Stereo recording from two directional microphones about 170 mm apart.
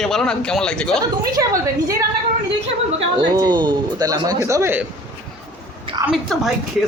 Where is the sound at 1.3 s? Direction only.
20° right (ahead or behind).